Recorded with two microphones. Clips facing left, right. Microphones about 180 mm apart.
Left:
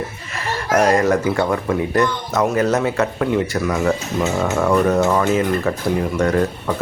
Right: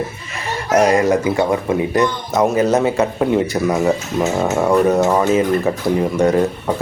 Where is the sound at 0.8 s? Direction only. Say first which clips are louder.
Right 2 dB; 15° right (ahead or behind).